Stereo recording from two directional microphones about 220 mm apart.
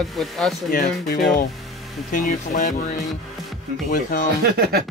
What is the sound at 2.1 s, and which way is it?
Speech, 35° left (ahead or behind).